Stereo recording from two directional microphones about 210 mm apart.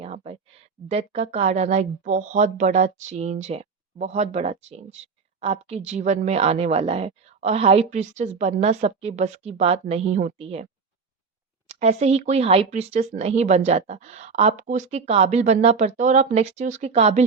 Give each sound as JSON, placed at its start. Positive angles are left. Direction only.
{"t": 0.0, "sound": "a woman's voice", "side_deg": -25}
{"t": 11.7, "sound": "speech", "side_deg": -30}